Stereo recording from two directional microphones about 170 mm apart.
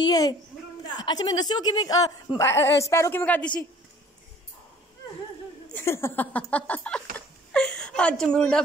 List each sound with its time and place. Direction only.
0.0 s a woman's voice: 25° left (ahead or behind)
5.7 s speech: 15° left (ahead or behind)